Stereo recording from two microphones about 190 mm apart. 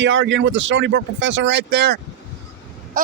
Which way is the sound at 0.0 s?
75° right (ahead or behind).